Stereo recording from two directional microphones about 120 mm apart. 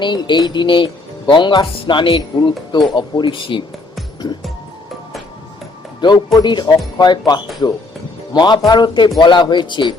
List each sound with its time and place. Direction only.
0.0 s speech: 40° left (ahead or behind)
6.0 s speech: 35° left (ahead or behind)